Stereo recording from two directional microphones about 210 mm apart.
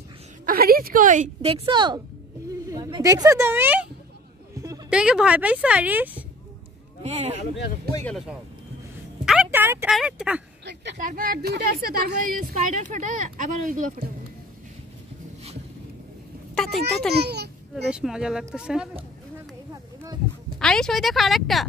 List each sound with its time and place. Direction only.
0.5 s speech: 45° right (ahead or behind); by 3.8 s 10° right (ahead or behind)
4.6 s a sound: 15° right (ahead or behind)
4.9 s a woman's voice: 5° right (ahead or behind)
7.0 s speech: 30° right (ahead or behind)
7.9 s speech: 10° left (ahead or behind)
9.2 s a woman's voice: 5° right (ahead or behind)
10.6 s speech: 55° right (ahead or behind)
11.0 s a woman's voice: 40° right (ahead or behind)
16.5 s speech: centre (ahead or behind)
17.1 s a sound: 50° right (ahead or behind)
17.8 s a woman's voice: 5° right (ahead or behind)
20.4 s a woman's voice: 5° left (ahead or behind)